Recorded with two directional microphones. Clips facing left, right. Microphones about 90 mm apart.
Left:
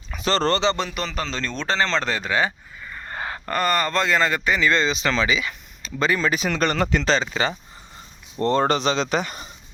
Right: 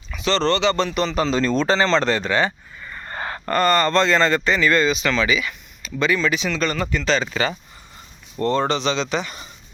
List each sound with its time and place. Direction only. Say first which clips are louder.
0.1 s speech: right 1 dB; 40° left (ahead or behind)
0.9 s speech: right 8 dB; centre (ahead or behind); by 7.0 s 55° left (ahead or behind)
7.0 s speech: right 1 dB; 30° left (ahead or behind)